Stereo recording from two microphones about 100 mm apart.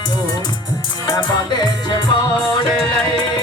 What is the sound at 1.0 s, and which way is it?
Music, 35° left (ahead or behind).